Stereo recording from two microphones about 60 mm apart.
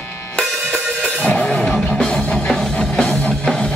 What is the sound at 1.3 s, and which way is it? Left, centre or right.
Music, centre.